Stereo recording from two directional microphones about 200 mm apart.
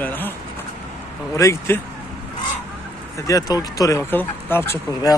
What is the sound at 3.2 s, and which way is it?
Speech, 20° left (ahead or behind).